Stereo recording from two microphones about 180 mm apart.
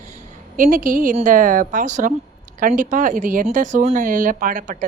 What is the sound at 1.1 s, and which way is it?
Speech, 45° right (ahead or behind).